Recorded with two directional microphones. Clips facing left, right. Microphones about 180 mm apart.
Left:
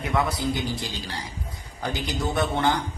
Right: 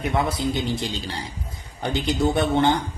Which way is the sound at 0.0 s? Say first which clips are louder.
Right 2 dB; 25° right (ahead or behind).